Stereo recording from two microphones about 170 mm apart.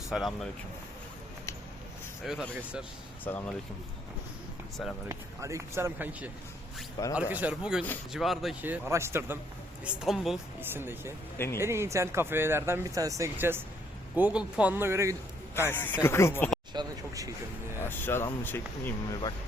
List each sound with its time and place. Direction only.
0.1 s speech: centre (ahead or behind)
2.2 s speech: 5° right (ahead or behind)
3.2 s speech: 10° left (ahead or behind)
5.0 s speech: 15° right (ahead or behind)
9.8 s speech: centre (ahead or behind)
11.3 s speech: 15° left (ahead or behind)
11.6 s speech: 15° right (ahead or behind)
15.5 s speech: 15° left (ahead or behind)
16.7 s speech: 20° right (ahead or behind)
17.7 s speech: 10° left (ahead or behind)